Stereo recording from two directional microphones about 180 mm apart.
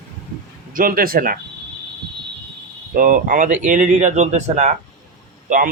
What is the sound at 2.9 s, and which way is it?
A man's voice, 50° right (ahead or behind).